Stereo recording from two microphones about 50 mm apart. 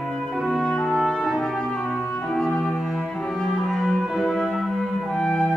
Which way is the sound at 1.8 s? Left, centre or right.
Left.